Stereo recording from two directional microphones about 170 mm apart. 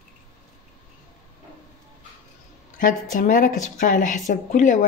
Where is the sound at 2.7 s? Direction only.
50° left (ahead or behind).